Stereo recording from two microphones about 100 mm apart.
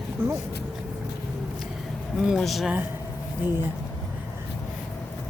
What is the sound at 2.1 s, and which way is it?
Speech, centre (ahead or behind).